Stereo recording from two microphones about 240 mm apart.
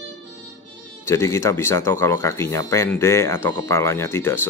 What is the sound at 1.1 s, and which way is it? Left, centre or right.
Speech, centre.